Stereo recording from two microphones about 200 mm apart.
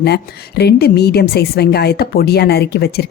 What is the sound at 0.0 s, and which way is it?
A woman's voice, 55° left (ahead or behind).